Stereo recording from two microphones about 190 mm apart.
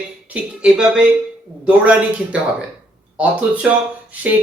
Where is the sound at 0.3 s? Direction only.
5° right (ahead or behind).